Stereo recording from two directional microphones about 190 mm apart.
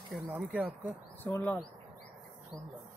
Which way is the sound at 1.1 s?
10° left (ahead or behind).